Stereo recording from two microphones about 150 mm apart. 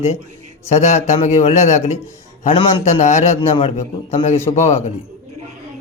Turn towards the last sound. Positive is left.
turn(degrees=45)  # may be behind; listen again after turning